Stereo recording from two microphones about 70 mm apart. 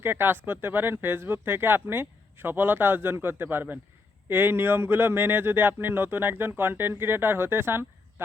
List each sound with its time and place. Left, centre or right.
0.0 s speech: right